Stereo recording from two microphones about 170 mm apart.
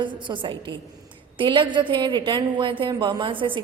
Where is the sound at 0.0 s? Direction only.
30° right (ahead or behind).